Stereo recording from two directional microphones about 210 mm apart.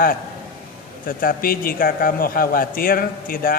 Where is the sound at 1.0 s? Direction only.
40° left (ahead or behind).